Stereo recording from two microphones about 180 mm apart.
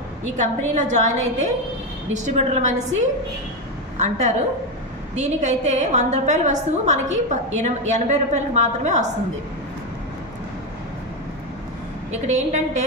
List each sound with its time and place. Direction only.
0.4 s a woman's voice: 40° right (ahead or behind)
4.0 s a woman's voice: 40° right (ahead or behind)
12.1 s a woman's voice: 40° right (ahead or behind)